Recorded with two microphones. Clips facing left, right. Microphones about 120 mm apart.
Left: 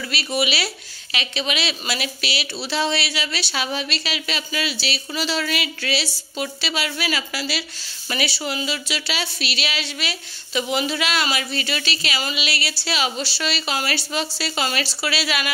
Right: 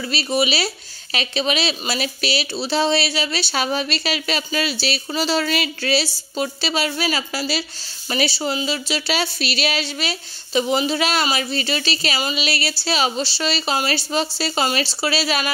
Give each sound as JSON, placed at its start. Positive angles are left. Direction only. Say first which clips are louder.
{"t": 0.1, "sound": "a woman's voice", "louder": "right 3 dB", "side_deg": -30}